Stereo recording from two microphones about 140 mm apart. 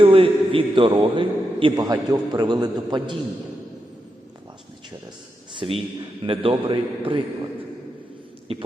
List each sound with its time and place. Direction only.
0.0 s a man's voice: 40° right (ahead or behind)
5.5 s a man's voice: 35° right (ahead or behind)
8.5 s a man's voice: 40° right (ahead or behind)